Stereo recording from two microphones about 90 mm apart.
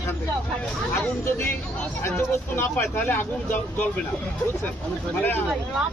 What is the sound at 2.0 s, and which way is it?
Speech, 25° left (ahead or behind).